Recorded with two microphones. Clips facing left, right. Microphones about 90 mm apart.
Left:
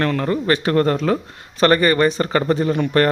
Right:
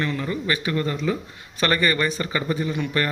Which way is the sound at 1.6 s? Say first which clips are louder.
Left 7 dB; 40° left (ahead or behind).